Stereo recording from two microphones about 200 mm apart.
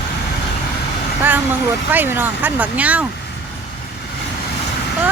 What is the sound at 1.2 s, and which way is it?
Speech, 10° right (ahead or behind).